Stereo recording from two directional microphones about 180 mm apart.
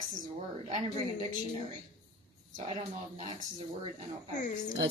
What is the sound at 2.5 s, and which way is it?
Speech, 30° right (ahead or behind).